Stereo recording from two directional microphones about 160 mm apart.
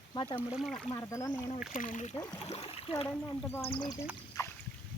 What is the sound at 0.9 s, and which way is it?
Speech, 20° left (ahead or behind).